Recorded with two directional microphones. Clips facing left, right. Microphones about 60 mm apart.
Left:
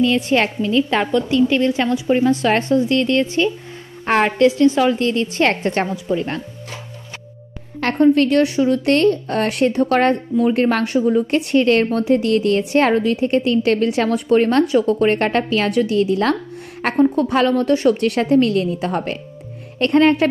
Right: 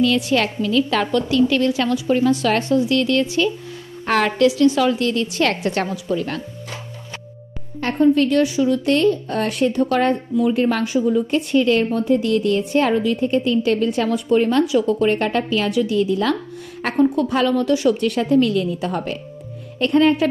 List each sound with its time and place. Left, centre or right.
0.0 s a woman's voice: left
7.8 s speech: left
11.0 s a woman's voice: left
11.2 s a woman's voice: left
13.1 s speech: left
17.1 s a woman's voice: left
17.9 s speech: left
19.8 s speech: left